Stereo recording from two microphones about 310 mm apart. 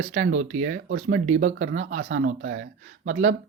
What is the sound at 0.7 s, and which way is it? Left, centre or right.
Speech, right.